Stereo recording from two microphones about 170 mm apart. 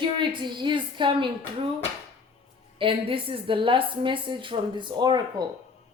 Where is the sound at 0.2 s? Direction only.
25° right (ahead or behind).